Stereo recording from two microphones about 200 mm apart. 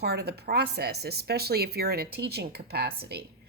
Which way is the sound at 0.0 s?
55° right (ahead or behind).